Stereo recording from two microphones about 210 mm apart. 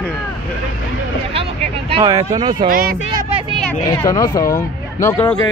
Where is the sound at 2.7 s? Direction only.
45° right (ahead or behind).